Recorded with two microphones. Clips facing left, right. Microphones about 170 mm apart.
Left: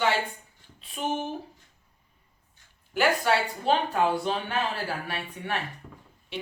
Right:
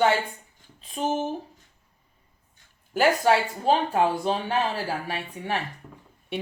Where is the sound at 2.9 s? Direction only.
40° right (ahead or behind).